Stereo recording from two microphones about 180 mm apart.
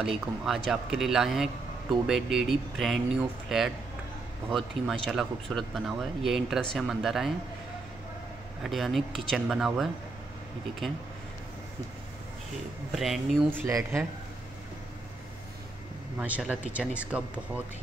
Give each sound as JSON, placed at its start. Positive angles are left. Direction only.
{"t": 0.0, "sound": "a man's voice", "side_deg": 0}
{"t": 8.6, "sound": "a man's voice", "side_deg": 0}
{"t": 12.9, "sound": "a man's voice", "side_deg": 0}
{"t": 13.5, "sound": "speech", "side_deg": -15}
{"t": 16.2, "sound": "speech", "side_deg": -5}